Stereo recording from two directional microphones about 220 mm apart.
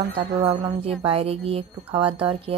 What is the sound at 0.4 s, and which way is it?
Speech, 25° right (ahead or behind).